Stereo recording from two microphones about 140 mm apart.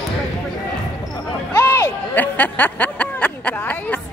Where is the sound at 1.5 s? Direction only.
20° left (ahead or behind).